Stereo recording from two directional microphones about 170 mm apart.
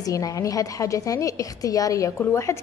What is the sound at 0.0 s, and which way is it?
A woman's voice, 20° left (ahead or behind).